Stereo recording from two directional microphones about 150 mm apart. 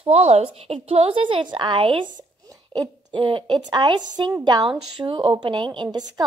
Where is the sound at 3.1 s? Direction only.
35° right (ahead or behind).